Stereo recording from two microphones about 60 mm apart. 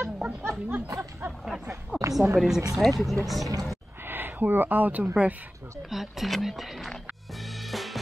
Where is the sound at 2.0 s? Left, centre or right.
Right.